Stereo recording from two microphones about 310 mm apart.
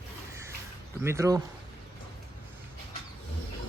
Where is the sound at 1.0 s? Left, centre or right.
Centre.